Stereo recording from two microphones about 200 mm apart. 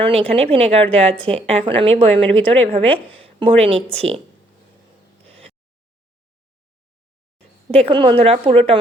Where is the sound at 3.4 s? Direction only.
30° right (ahead or behind).